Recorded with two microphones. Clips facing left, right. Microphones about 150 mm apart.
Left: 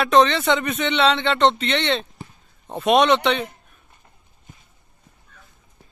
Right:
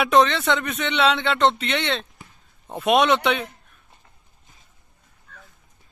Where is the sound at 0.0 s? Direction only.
Centre (ahead or behind).